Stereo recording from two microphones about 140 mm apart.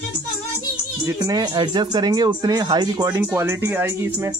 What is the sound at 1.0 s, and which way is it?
Speech, 25° right (ahead or behind).